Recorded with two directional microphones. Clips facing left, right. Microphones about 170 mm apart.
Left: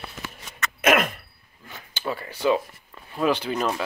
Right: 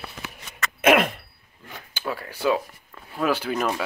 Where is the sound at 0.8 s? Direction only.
25° right (ahead or behind).